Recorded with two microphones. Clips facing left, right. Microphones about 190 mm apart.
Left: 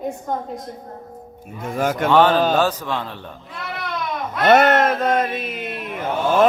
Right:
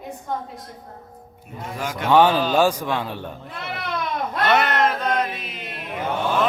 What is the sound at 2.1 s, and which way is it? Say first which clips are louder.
A man's voice: even; 15° right (ahead or behind).